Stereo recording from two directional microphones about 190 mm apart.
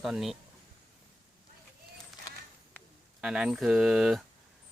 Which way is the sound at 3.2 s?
5° right (ahead or behind).